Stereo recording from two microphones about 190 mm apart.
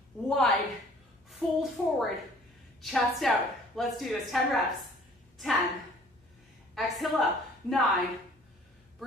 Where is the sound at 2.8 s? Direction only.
Centre (ahead or behind).